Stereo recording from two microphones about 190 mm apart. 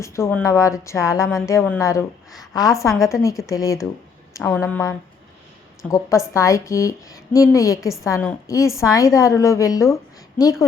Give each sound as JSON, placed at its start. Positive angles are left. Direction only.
{"t": 0.0, "sound": "a woman's voice", "side_deg": 15}